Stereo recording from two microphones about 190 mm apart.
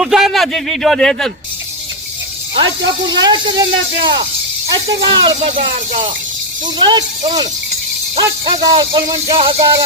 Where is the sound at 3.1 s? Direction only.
20° right (ahead or behind).